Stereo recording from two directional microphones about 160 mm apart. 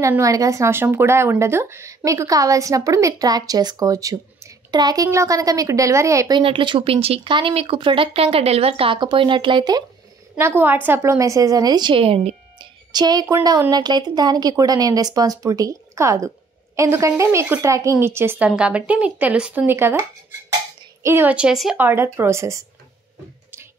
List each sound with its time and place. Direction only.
0.0 s speech: 20° right (ahead or behind)
6.4 s speech: 30° right (ahead or behind)
10.3 s speech: 10° right (ahead or behind); by 12.4 s 35° right (ahead or behind)
12.9 s a woman's voice: 25° right (ahead or behind)